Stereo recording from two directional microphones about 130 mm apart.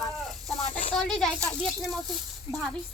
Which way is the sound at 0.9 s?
5° left (ahead or behind).